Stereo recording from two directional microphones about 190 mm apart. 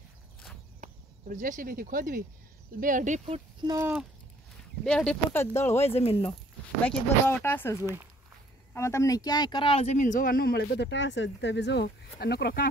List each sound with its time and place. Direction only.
1.3 s speech: 45° right (ahead or behind)
3.6 s speech: 15° right (ahead or behind)
4.8 s speech: 5° left (ahead or behind)
5.8 s speech: 30° left (ahead or behind)
6.8 s speech: 10° left (ahead or behind)
7.8 s speech: 10° right (ahead or behind)
8.7 s speech: 15° left (ahead or behind); by 12.6 s 60° left (ahead or behind)